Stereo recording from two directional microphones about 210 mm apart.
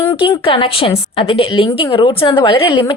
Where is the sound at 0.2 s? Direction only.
25° left (ahead or behind).